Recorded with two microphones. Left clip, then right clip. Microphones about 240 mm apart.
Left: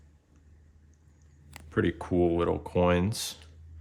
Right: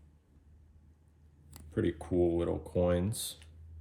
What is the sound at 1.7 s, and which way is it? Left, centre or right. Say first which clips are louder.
Speech: left 5 dB; left.